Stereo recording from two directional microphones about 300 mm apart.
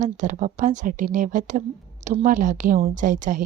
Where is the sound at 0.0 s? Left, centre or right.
Right.